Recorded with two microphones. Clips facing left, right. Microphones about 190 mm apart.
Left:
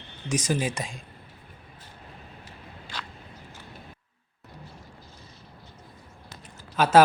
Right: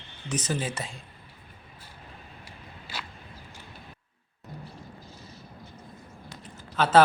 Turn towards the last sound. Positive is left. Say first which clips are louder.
# left 2 dB
turn(degrees=10)  # may be behind; listen again after turning